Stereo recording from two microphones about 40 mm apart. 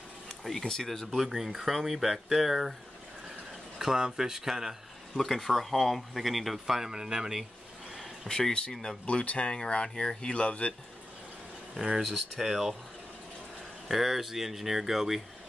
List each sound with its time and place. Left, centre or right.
0.4 s speech: centre
3.7 s speech: centre
5.1 s speech: centre
6.9 s speech: centre
8.3 s speech: centre
9.2 s speech: left
9.5 s speech: left
12.0 s speech: centre
13.8 s speech: centre